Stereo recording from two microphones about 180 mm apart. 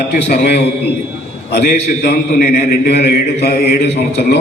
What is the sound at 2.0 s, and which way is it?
A man's voice, 55° left (ahead or behind).